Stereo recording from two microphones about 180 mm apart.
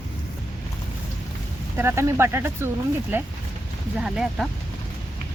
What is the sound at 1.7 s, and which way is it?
Speech, 15° right (ahead or behind).